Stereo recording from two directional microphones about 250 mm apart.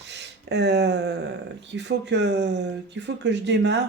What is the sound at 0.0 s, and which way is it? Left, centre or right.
Speech, right.